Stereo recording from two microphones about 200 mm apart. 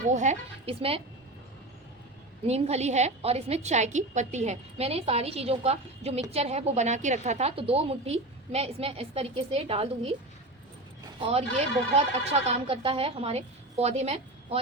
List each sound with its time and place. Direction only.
0.1 s a woman's voice: 35° right (ahead or behind)
2.5 s a woman's voice: 35° right (ahead or behind)
11.2 s a woman's voice: 30° right (ahead or behind)